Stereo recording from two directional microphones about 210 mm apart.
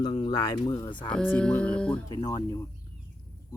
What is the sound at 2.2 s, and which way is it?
Speech, 15° left (ahead or behind).